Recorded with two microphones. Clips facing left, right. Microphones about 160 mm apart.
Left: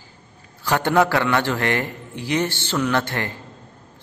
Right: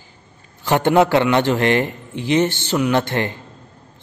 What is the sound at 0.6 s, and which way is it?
A man's voice, 20° right (ahead or behind).